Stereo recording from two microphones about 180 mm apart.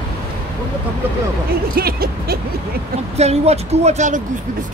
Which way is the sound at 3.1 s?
35° right (ahead or behind).